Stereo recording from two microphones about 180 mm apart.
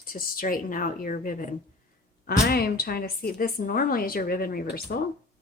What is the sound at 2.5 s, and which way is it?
A woman's voice, 60° left (ahead or behind).